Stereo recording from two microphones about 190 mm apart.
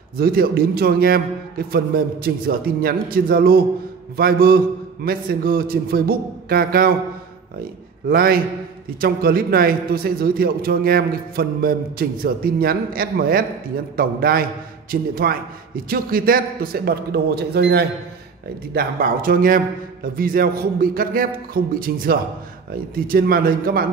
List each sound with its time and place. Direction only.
0.2 s a man's voice: 50° right (ahead or behind)
8.1 s a man's voice: 50° right (ahead or behind)